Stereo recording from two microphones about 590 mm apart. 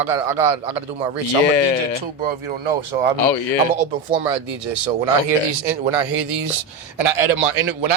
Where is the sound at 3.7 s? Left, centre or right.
Right.